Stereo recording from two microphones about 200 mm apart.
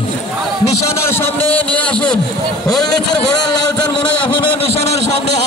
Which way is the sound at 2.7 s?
5° left (ahead or behind).